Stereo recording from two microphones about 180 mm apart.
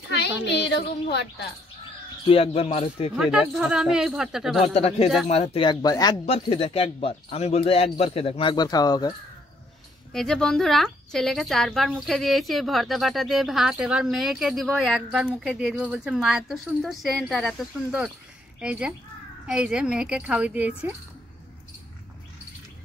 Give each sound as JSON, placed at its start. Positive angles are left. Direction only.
{"t": 0.2, "sound": "a child's voice", "side_deg": 65}
{"t": 2.2, "sound": "speech", "side_deg": 35}
{"t": 3.2, "sound": "a woman's voice", "side_deg": -5}
{"t": 4.6, "sound": "speech", "side_deg": 35}
{"t": 6.2, "sound": "speech", "side_deg": 35}
{"t": 10.1, "sound": "a woman's voice", "side_deg": 5}